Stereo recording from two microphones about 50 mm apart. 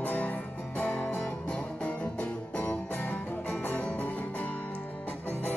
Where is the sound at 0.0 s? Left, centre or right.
Left.